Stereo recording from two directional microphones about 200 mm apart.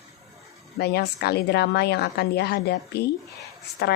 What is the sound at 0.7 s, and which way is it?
A woman's voice, 50° left (ahead or behind).